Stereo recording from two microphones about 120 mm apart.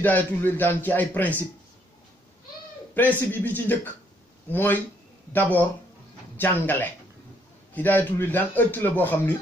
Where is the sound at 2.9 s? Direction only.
15° left (ahead or behind).